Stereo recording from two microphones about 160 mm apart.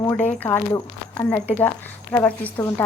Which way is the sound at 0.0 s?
15° left (ahead or behind).